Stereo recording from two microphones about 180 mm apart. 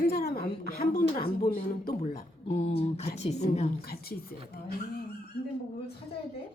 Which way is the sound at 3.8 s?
60° left (ahead or behind).